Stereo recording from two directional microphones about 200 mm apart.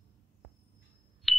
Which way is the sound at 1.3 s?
Centre (ahead or behind).